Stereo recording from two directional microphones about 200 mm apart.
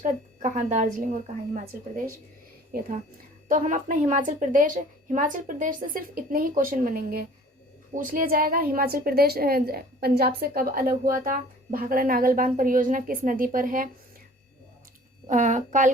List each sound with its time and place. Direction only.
0.0 s a woman's voice: 40° right (ahead or behind)
3.5 s a woman's voice: 40° right (ahead or behind)
15.3 s a woman's voice: 40° right (ahead or behind)